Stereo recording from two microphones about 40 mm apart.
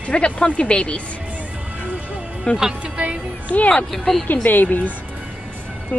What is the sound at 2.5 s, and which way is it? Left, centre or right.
Speech, left.